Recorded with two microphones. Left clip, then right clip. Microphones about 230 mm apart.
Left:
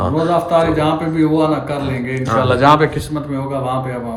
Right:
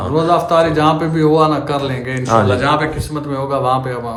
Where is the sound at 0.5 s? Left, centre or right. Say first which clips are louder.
Right 2 dB; centre.